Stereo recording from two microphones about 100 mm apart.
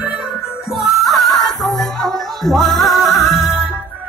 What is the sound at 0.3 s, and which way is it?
Music, centre (ahead or behind).